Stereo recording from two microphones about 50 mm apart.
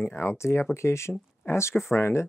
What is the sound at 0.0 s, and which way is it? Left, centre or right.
Speech, left.